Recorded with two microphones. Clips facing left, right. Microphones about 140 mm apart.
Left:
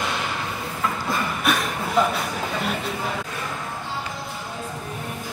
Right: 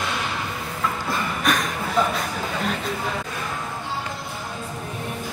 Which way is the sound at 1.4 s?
5° left (ahead or behind).